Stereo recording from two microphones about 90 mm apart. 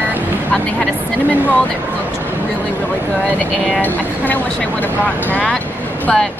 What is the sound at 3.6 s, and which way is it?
Speech, 20° left (ahead or behind).